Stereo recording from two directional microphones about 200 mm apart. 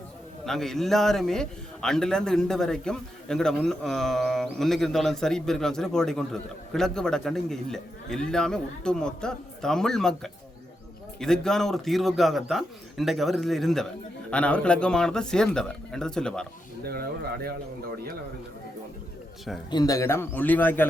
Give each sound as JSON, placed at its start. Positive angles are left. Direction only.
{"t": 0.4, "sound": "a man's voice", "side_deg": 0}
{"t": 16.8, "sound": "speech", "side_deg": -50}
{"t": 19.7, "sound": "a man's voice", "side_deg": 20}